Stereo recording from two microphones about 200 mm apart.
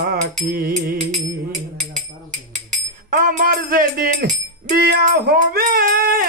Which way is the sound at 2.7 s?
45° right (ahead or behind).